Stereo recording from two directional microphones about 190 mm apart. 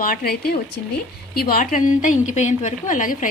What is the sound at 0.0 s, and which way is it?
A woman's voice, 45° left (ahead or behind).